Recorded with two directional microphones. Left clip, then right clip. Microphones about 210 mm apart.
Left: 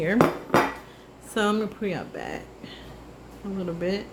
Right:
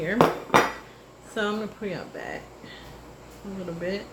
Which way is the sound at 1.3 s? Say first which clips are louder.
Left 3 dB; 45° left (ahead or behind).